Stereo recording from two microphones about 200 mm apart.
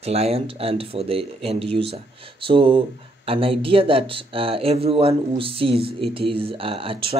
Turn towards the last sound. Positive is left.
turn(degrees=-25)  # may be behind; listen again after turning